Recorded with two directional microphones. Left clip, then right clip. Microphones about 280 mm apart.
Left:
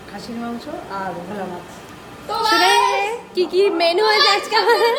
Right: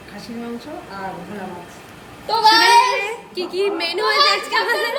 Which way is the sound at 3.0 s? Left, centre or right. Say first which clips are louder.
Left 5 dB; centre.